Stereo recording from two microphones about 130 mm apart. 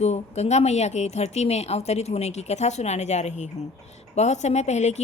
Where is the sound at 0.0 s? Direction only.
60° left (ahead or behind).